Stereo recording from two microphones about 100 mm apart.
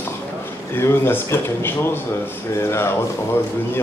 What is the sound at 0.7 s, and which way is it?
Speech, 25° left (ahead or behind).